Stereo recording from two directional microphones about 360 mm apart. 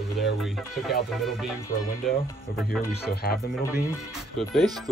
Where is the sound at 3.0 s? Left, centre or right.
Left.